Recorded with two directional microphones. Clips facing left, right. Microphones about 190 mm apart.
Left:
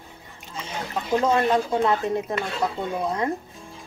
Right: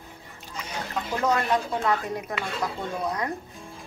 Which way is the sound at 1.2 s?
25° left (ahead or behind).